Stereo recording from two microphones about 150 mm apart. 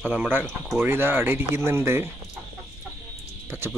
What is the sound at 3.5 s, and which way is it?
Music, 15° right (ahead or behind).